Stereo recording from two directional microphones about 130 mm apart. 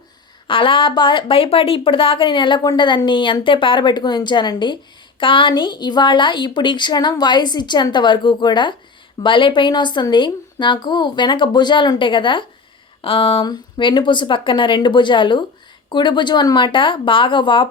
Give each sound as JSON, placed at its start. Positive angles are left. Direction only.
{"t": 0.4, "sound": "speech", "side_deg": 40}